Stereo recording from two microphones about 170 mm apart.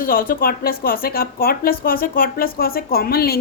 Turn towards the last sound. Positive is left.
turn(degrees=65)  # may be behind; listen again after turning